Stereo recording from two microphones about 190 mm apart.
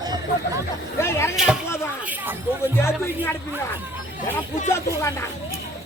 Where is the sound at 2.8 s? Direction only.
15° left (ahead or behind).